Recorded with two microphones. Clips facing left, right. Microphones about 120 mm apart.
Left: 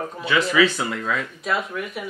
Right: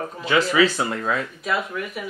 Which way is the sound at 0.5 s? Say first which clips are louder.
Even; 35° right (ahead or behind).